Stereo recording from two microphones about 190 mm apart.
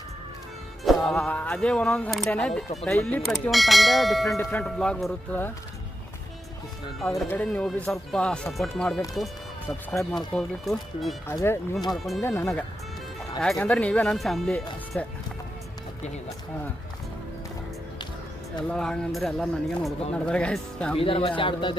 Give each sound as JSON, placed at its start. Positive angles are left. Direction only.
{"t": 0.9, "sound": "speech", "side_deg": 0}
{"t": 3.2, "sound": "speech", "side_deg": 0}
{"t": 7.1, "sound": "speech", "side_deg": 10}
{"t": 9.1, "sound": "music", "side_deg": 0}
{"t": 10.3, "sound": "speech", "side_deg": 0}
{"t": 11.3, "sound": "speech", "side_deg": 15}
{"t": 11.9, "sound": "speech", "side_deg": 0}
{"t": 12.2, "sound": "speech", "side_deg": 15}
{"t": 18.7, "sound": "speech", "side_deg": 5}
{"t": 20.9, "sound": "speech", "side_deg": 30}